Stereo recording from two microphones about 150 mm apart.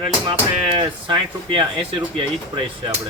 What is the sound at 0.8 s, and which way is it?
Speech, 35° right (ahead or behind).